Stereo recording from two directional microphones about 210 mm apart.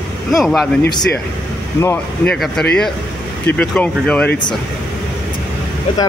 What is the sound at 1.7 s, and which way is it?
Speech, 10° left (ahead or behind).